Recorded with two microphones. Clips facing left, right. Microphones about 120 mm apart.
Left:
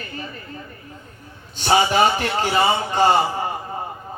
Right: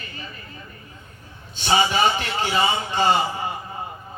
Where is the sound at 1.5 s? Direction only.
45° left (ahead or behind).